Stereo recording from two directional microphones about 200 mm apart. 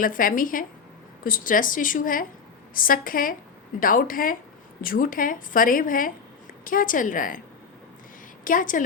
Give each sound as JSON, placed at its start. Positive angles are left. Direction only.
{"t": 0.0, "sound": "speech", "side_deg": 45}
{"t": 8.4, "sound": "a woman's voice", "side_deg": 40}